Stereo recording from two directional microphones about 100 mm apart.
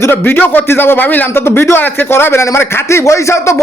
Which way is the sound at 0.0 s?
20° left (ahead or behind).